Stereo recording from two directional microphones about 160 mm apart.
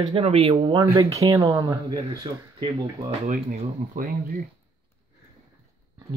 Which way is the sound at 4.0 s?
60° right (ahead or behind).